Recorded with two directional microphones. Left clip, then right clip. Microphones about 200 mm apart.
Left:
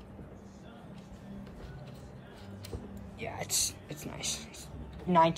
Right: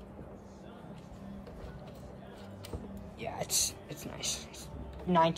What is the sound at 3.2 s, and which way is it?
Speech, 20° right (ahead or behind).